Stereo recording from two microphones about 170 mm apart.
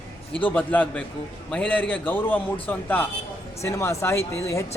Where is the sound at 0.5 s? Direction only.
10° left (ahead or behind).